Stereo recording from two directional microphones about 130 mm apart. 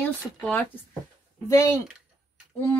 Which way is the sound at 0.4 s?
10° left (ahead or behind).